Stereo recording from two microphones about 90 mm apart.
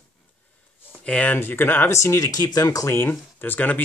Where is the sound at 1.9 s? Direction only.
35° left (ahead or behind).